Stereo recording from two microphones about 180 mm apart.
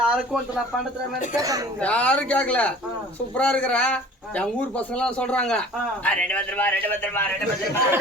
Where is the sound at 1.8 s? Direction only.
5° left (ahead or behind).